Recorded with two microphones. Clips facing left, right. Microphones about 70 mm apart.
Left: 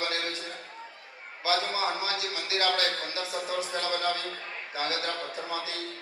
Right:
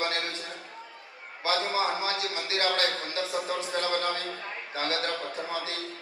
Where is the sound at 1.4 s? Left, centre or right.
Right.